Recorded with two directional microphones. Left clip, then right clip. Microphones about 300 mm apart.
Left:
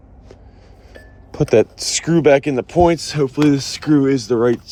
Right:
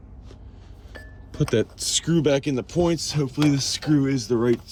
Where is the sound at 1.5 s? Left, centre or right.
Centre.